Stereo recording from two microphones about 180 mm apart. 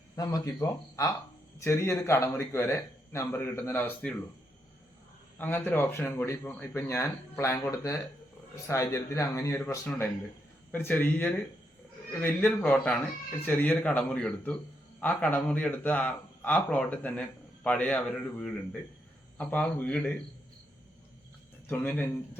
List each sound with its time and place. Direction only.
0.2 s speech: 20° left (ahead or behind)
5.4 s speech: 10° left (ahead or behind)
21.7 s speech: 10° left (ahead or behind)